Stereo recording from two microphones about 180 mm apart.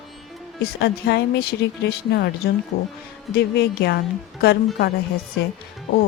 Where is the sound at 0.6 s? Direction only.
65° left (ahead or behind).